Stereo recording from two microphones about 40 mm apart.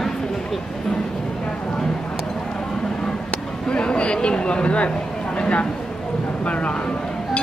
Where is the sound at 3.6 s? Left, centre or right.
Left.